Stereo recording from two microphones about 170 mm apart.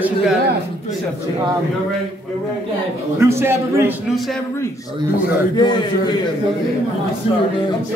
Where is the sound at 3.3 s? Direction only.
15° right (ahead or behind).